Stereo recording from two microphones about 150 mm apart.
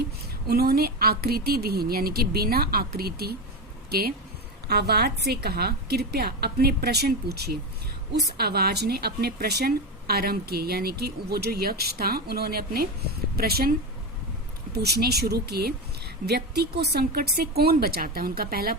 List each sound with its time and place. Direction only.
0.0 s a woman's voice: 90° right